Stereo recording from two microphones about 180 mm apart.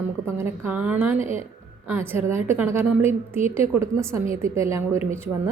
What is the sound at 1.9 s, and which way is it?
A woman's voice, 15° right (ahead or behind).